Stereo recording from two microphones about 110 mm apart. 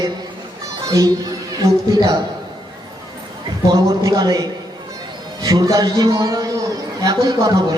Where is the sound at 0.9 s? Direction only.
35° right (ahead or behind).